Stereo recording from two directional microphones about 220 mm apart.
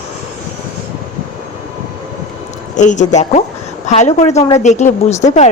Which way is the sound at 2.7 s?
35° left (ahead or behind).